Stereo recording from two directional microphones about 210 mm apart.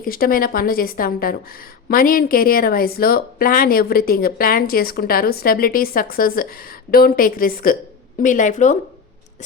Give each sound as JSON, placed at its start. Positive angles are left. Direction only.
{"t": 0.0, "sound": "speech", "side_deg": 45}